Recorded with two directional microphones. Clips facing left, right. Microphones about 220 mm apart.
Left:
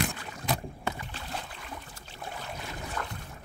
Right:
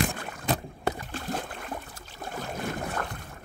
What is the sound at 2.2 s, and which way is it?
Boat, 45° right (ahead or behind).